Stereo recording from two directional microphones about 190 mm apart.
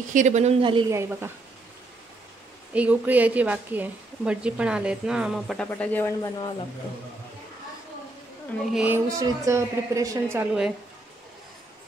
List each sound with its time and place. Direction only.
0.1 s a woman's voice: 40° right (ahead or behind)
0.9 s a woman's voice: 10° right (ahead or behind)
2.7 s a woman's voice: 10° right (ahead or behind)
5.7 s speech: 10° left (ahead or behind)
8.7 s a woman's voice: 10° right (ahead or behind)